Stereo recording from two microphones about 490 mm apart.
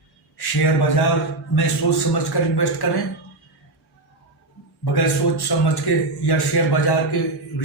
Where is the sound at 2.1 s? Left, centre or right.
Left.